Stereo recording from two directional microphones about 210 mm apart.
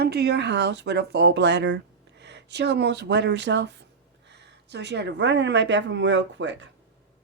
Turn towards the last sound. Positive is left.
turn(degrees=-60)  # may be behind; listen again after turning